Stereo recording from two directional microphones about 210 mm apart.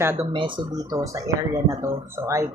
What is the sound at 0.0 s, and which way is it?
Speech, 15° right (ahead or behind).